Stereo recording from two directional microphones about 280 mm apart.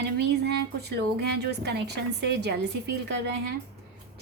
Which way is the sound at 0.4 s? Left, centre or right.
Right.